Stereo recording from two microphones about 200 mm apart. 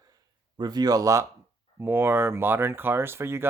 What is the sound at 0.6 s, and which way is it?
Speech, 20° right (ahead or behind).